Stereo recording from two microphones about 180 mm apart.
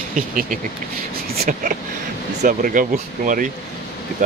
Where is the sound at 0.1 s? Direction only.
50° right (ahead or behind).